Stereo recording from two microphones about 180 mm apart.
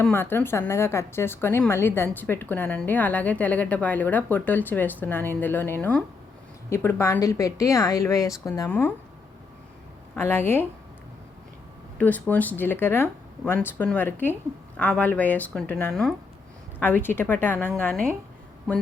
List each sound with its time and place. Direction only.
0.0 s a woman's voice: 10° left (ahead or behind)
10.2 s a woman's voice: 10° left (ahead or behind)
11.9 s a woman's voice: 10° left (ahead or behind)